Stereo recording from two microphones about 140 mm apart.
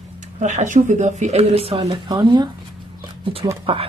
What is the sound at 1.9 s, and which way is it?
Speech, 25° right (ahead or behind).